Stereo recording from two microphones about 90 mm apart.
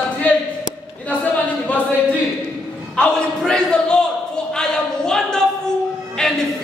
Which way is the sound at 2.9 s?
5° left (ahead or behind).